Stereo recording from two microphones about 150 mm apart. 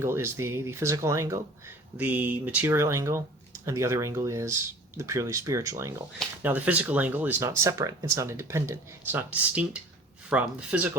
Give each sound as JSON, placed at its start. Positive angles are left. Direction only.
{"t": 0.0, "sound": "speech", "side_deg": -15}